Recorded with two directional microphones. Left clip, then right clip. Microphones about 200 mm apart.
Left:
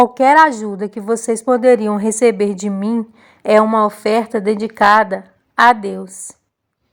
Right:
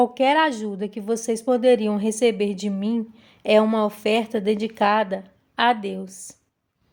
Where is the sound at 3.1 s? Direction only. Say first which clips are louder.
Left 6 dB; 15° left (ahead or behind).